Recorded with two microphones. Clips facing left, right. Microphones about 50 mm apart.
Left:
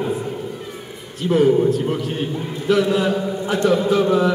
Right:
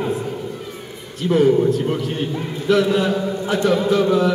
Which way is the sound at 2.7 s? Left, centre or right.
Centre.